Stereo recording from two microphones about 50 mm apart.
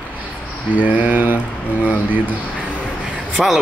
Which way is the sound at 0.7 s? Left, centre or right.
Right.